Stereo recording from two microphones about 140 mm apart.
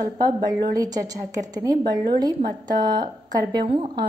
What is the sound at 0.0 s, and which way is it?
A woman's voice, 30° right (ahead or behind).